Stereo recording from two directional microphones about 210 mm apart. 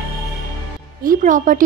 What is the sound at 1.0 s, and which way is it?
Speech, 40° right (ahead or behind).